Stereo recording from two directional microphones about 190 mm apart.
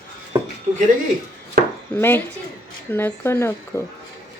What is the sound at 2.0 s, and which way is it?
Speech, 10° left (ahead or behind).